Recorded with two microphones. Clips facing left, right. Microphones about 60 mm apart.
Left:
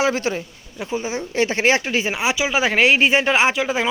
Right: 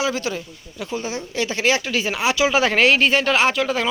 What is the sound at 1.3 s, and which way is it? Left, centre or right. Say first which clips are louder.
Speech: left 3 dB; left.